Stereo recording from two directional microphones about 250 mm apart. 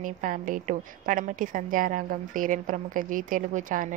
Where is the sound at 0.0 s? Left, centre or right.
Right.